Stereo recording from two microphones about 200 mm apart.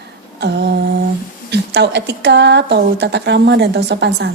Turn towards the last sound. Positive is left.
turn(degrees=-60)  # may be behind; listen again after turning